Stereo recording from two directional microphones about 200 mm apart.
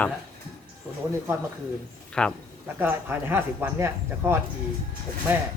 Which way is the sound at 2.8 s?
10° right (ahead or behind).